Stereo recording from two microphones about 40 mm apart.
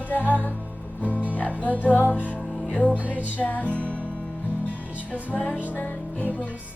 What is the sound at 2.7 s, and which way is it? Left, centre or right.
Music, left.